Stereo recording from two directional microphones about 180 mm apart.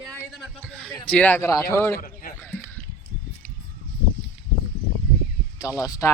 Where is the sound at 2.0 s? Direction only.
50° left (ahead or behind).